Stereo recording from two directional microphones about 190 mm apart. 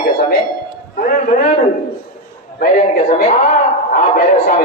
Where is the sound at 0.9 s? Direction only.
45° left (ahead or behind).